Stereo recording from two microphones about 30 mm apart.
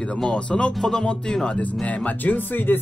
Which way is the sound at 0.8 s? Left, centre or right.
Left.